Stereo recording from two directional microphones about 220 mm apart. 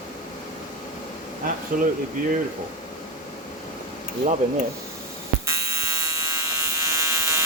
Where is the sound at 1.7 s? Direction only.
35° right (ahead or behind).